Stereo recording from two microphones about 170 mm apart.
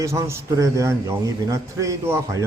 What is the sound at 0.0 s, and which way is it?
A man's voice, 15° right (ahead or behind).